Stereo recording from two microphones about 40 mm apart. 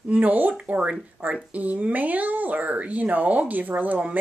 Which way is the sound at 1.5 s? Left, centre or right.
Right.